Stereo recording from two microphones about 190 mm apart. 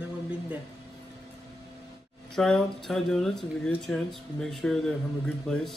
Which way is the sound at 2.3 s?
5° left (ahead or behind).